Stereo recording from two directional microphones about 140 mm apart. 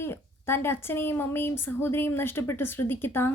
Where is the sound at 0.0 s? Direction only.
15° left (ahead or behind).